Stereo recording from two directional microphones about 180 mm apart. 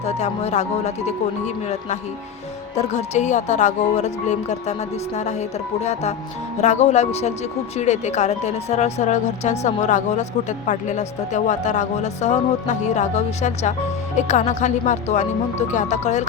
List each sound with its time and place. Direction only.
0.0 s speech: 35° left (ahead or behind)